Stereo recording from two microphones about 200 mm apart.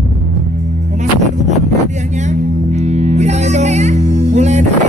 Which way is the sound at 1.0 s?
35° right (ahead or behind).